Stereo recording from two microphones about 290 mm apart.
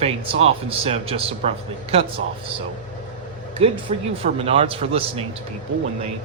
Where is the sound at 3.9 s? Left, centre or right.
Right.